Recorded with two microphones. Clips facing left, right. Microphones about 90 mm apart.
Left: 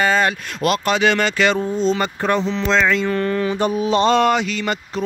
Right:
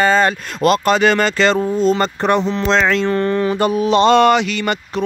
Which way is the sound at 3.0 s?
35° right (ahead or behind).